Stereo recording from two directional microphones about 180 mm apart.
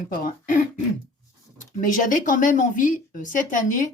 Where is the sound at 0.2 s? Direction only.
50° left (ahead or behind).